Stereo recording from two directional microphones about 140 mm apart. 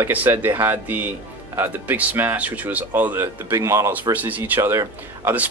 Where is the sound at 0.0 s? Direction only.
15° right (ahead or behind).